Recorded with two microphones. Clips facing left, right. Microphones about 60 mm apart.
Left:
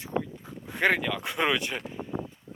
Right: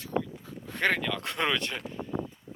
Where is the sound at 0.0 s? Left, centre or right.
Centre.